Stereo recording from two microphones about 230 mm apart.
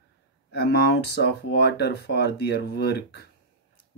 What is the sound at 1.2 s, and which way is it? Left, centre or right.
Speech, left.